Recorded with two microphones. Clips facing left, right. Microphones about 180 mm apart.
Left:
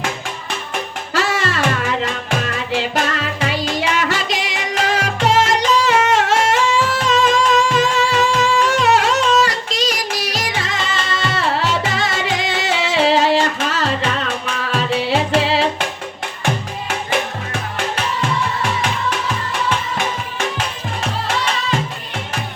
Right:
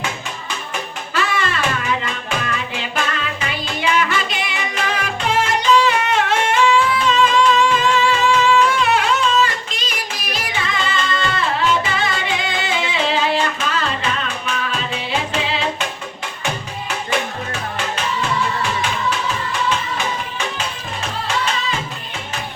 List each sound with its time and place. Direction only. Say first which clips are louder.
1.1 s music: left 2 dB; 80° left
3.5 s music: right 1 dB; 85° left
13.7 s music: left 2 dB; 65° left (ahead or behind); by 15.6 s 80° left